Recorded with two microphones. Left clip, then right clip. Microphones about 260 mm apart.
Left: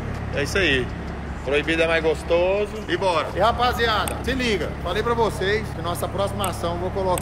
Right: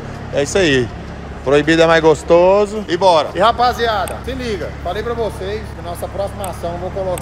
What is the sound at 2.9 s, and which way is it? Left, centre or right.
Speech, centre.